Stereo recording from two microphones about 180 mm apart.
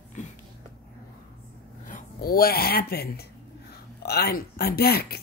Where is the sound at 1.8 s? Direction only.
50° left (ahead or behind).